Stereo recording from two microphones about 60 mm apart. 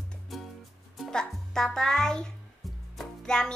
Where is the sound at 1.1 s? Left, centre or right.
Centre.